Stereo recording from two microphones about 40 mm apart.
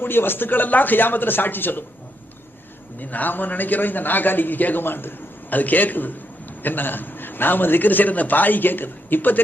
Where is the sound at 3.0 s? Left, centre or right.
Left.